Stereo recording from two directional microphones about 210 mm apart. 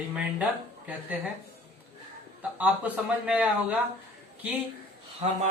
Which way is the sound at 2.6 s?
5° right (ahead or behind).